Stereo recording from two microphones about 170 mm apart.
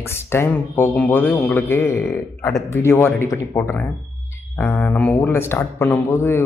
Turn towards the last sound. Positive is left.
turn(degrees=15)  # may be behind; listen again after turning